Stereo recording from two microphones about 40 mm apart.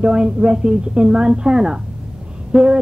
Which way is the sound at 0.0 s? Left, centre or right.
Centre.